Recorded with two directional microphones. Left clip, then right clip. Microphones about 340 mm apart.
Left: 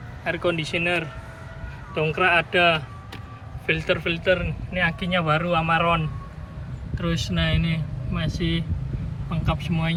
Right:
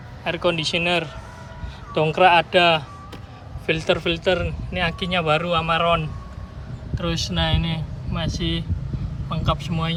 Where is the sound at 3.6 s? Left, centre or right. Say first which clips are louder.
Right 2 dB; right.